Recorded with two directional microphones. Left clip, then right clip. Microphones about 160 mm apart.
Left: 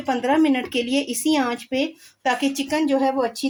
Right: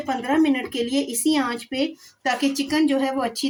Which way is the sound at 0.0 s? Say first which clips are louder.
Left 2 dB; 65° left (ahead or behind).